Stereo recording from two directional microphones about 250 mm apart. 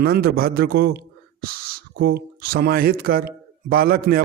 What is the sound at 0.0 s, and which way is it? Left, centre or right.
Speech, right.